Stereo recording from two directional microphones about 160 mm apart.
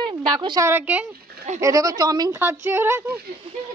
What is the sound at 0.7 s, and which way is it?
A woman's voice, 10° right (ahead or behind).